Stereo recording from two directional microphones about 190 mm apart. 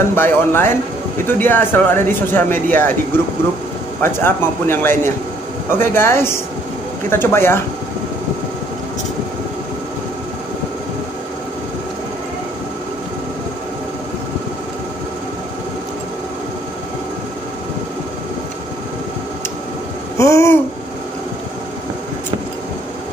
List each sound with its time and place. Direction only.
0.1 s speech: 10° left (ahead or behind)
4.0 s speech: 10° left (ahead or behind)
20.2 s a sound: 15° left (ahead or behind)